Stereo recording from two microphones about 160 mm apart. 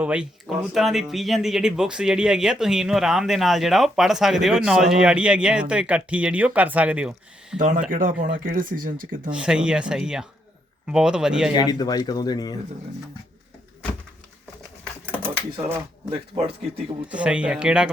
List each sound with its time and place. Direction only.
0.0 s speech: 5° right (ahead or behind)
7.9 s speech: 60° right (ahead or behind)
9.3 s speech: 5° right (ahead or behind)
11.5 s speech: 25° left (ahead or behind)
16.0 s speech: 30° right (ahead or behind)
17.1 s speech: 5° right (ahead or behind)